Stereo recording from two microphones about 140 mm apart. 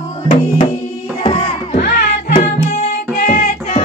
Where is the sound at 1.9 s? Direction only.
80° left.